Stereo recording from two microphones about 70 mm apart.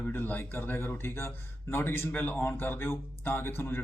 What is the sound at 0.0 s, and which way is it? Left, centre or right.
A man's voice, left.